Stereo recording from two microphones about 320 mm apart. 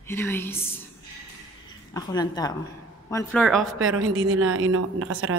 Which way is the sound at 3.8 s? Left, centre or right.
Right.